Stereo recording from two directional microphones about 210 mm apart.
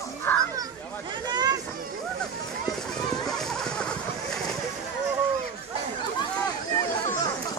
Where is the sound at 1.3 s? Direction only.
20° right (ahead or behind).